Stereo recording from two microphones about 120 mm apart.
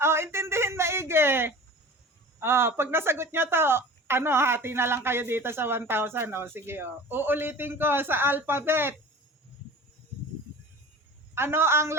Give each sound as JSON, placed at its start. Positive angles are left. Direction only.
{"t": 0.0, "sound": "a sound", "side_deg": -20}
{"t": 2.4, "sound": "speech", "side_deg": -20}
{"t": 11.3, "sound": "speech", "side_deg": -20}